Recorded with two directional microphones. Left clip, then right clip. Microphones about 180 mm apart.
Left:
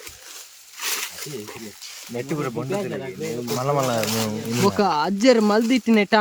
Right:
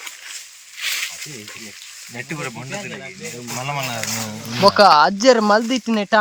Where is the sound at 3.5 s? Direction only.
20° left (ahead or behind).